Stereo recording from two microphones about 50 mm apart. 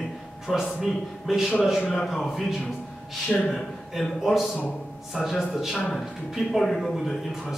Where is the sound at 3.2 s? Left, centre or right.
Left.